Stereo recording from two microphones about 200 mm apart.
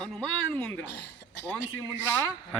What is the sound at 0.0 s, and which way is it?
Speech, 5° left (ahead or behind).